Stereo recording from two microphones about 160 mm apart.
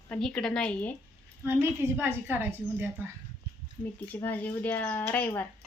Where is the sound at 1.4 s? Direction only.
15° right (ahead or behind).